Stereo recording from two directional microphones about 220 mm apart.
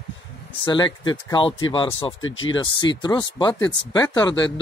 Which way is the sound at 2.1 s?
65° left (ahead or behind).